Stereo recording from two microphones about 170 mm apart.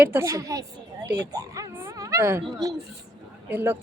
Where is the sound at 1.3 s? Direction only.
20° right (ahead or behind).